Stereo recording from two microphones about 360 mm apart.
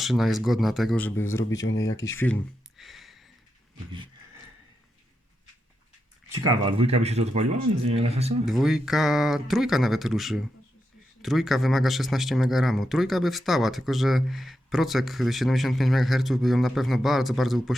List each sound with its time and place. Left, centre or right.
0.0 s speech: centre
6.3 s speech: centre
8.4 s speech: centre